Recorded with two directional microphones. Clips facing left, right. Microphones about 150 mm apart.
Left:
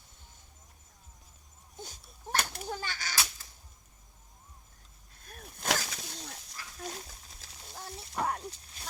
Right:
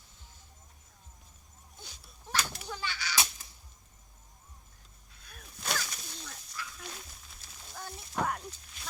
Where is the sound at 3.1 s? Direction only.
20° right (ahead or behind).